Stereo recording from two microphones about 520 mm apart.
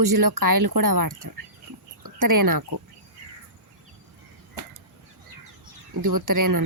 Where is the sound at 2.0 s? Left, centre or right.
Right.